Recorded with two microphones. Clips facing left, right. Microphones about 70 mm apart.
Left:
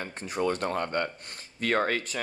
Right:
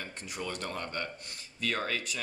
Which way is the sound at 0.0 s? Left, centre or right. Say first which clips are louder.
Left 9 dB; left.